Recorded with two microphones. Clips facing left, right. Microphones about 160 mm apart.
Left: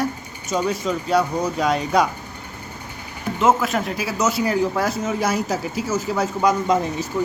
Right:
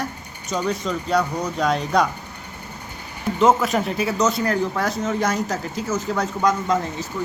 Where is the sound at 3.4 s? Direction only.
5° left (ahead or behind).